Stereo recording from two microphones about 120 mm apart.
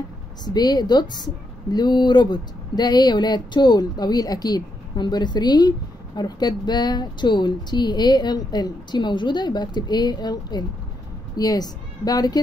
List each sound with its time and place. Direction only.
0.5 s a woman's voice: 35° left (ahead or behind)